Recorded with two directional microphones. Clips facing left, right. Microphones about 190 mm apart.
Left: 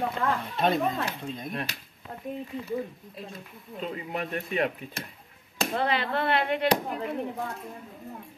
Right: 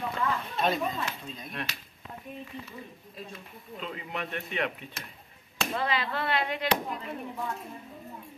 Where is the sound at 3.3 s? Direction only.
40° left (ahead or behind).